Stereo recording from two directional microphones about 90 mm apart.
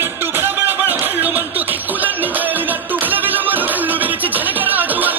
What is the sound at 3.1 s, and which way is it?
Music, 20° right (ahead or behind).